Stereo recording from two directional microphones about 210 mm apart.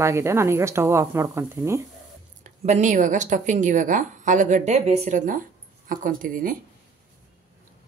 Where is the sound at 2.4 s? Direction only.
35° right (ahead or behind).